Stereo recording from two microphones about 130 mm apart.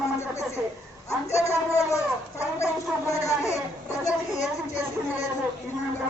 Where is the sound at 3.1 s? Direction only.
25° left (ahead or behind).